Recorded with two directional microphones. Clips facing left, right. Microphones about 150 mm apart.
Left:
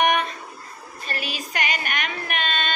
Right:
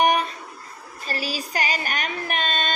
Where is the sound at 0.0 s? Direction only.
35° right (ahead or behind).